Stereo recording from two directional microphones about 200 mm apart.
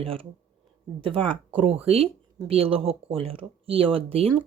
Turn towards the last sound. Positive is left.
turn(degrees=-30)  # may be behind; listen again after turning